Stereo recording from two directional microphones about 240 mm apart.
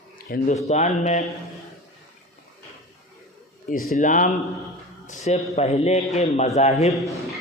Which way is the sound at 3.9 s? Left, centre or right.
Left.